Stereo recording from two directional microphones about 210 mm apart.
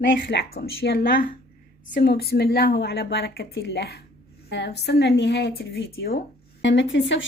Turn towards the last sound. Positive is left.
turn(degrees=60)  # may be behind; listen again after turning